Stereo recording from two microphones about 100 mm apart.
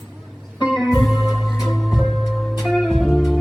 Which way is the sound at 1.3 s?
Centre (ahead or behind).